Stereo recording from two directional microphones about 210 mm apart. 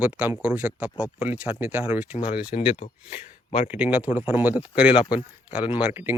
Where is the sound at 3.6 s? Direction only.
5° right (ahead or behind).